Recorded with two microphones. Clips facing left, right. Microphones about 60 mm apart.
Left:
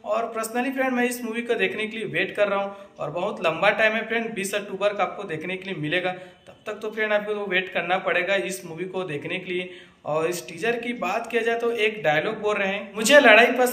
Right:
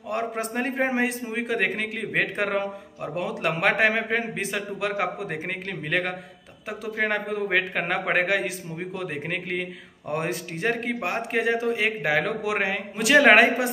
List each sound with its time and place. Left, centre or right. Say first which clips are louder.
0.1 s a man's voice: left 3 dB; right